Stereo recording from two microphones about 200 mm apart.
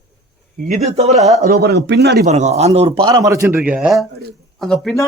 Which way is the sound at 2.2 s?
35° right (ahead or behind).